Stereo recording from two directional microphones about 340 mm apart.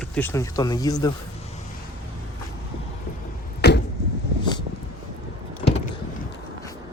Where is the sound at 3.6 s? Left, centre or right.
Left.